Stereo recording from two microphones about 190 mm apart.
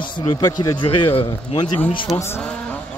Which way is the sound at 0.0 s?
25° left (ahead or behind).